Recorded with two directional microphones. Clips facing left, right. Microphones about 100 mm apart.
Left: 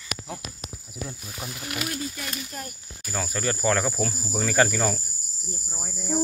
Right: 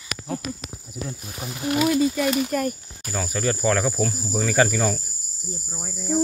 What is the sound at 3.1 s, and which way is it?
Cricket, centre (ahead or behind).